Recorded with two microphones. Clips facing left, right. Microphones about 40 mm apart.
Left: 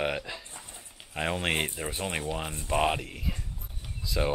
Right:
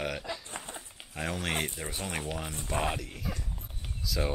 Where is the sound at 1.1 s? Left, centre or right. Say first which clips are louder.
Left 4 dB; left.